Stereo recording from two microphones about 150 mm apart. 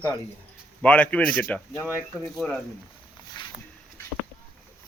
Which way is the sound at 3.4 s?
30° left (ahead or behind).